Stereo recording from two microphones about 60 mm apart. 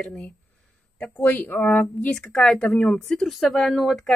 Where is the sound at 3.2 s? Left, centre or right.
Centre.